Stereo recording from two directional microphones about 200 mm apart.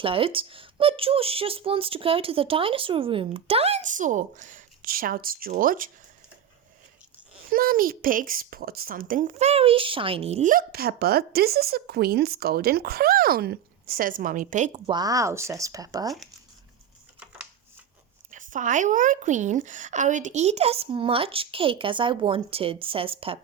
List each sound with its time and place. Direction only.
0.0 s speech: 25° right (ahead or behind); by 5.9 s 45° right (ahead or behind)
7.5 s a woman's voice: 45° right (ahead or behind)
14.8 s speech: 20° right (ahead or behind)
18.3 s speech: 40° right (ahead or behind)